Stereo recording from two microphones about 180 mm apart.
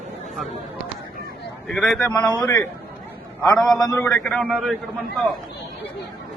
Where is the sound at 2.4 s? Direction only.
15° left (ahead or behind).